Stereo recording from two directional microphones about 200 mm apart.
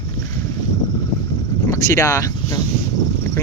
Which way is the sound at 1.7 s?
15° left (ahead or behind).